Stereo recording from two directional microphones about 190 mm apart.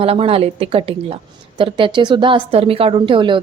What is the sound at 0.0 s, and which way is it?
A woman's voice, 30° right (ahead or behind).